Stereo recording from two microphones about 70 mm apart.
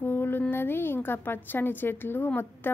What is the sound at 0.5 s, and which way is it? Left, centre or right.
A woman's voice, left.